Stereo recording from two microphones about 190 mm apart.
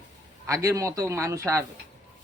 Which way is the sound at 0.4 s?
15° right (ahead or behind).